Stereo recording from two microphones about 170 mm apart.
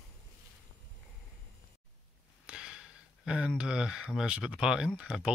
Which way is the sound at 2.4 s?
5° right (ahead or behind).